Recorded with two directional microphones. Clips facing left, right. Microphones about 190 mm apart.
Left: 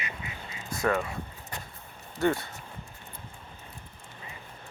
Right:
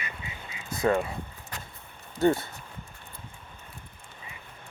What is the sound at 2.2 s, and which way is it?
Speech, 25° right (ahead or behind).